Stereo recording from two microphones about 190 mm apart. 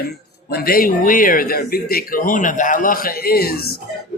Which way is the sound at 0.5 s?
50° left (ahead or behind).